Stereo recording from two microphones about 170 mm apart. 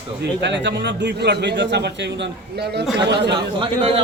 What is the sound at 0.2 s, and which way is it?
A man's voice, 90° right.